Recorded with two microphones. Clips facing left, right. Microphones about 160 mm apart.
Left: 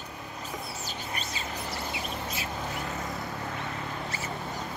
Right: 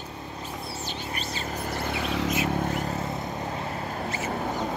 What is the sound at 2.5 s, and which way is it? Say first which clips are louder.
Vehicle: right 7 dB; 45° right (ahead or behind).